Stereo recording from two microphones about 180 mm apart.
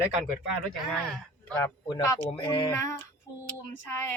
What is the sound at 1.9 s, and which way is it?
A woman's voice, 15° left (ahead or behind).